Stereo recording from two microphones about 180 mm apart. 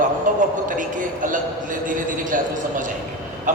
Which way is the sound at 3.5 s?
45° right (ahead or behind).